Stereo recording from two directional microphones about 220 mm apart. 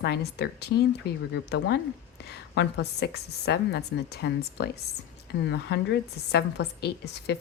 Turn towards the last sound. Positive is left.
turn(degrees=50)  # may be behind; listen again after turning